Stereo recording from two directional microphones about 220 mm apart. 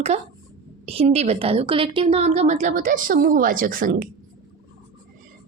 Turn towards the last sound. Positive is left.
turn(degrees=-40)  # may be behind; listen again after turning